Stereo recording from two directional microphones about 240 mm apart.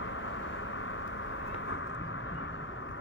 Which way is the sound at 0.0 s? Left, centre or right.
Left.